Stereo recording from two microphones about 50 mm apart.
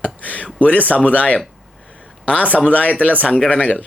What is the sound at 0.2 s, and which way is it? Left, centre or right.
Speech, left.